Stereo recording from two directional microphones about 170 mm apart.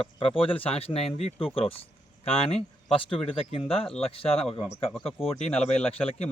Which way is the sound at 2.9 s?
35° left (ahead or behind).